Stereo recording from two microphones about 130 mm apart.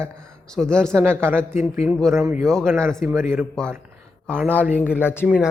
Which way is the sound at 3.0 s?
20° right (ahead or behind).